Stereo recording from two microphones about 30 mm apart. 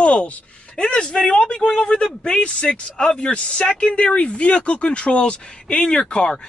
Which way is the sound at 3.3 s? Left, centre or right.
Left.